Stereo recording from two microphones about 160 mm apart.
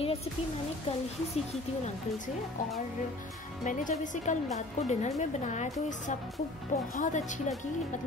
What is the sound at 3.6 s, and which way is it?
A woman's voice, 50° left (ahead or behind).